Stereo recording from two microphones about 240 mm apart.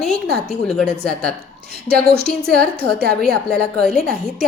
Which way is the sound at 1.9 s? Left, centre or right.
Right.